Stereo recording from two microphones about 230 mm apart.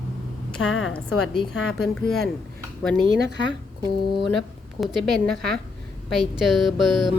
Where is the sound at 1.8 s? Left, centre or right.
Centre.